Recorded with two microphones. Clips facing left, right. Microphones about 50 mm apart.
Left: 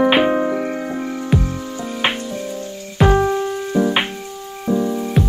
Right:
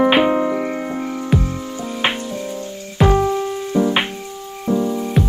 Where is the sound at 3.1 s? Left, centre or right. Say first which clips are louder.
Left 1 dB; left.